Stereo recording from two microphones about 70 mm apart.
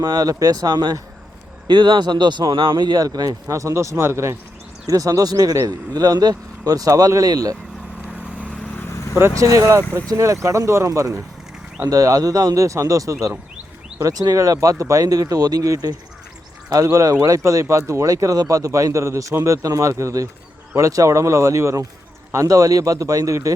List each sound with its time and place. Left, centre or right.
0.0 s speech: right
3.5 s speech: right
4.9 s speech: right
8.0 s vehicle: centre
9.4 s speech: right
11.9 s speech: right